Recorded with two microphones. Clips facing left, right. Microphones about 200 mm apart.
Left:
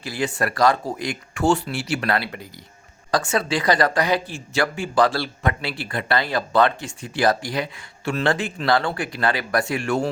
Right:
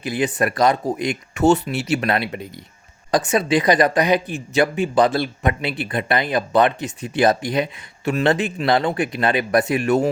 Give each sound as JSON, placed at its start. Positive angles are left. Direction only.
{"t": 0.0, "sound": "speech", "side_deg": -20}